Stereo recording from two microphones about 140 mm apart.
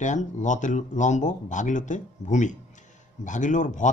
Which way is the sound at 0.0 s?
60° left (ahead or behind).